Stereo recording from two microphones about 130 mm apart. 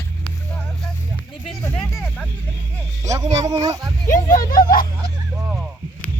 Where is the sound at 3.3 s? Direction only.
30° right (ahead or behind).